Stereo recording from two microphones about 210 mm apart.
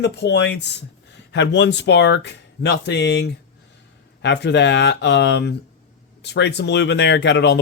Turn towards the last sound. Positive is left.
turn(degrees=55)  # may be behind; listen again after turning